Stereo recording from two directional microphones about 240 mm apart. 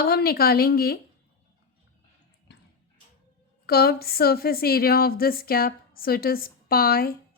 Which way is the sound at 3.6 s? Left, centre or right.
Left.